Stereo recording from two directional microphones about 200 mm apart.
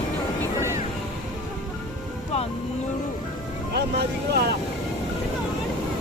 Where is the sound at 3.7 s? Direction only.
55° right (ahead or behind).